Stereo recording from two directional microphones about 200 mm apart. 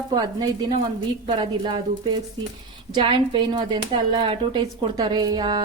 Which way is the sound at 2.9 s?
25° right (ahead or behind).